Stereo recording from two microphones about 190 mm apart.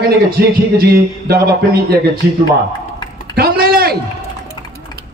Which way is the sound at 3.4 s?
50° right (ahead or behind).